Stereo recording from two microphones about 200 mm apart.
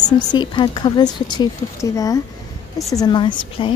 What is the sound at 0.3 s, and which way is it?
Speech, 20° left (ahead or behind).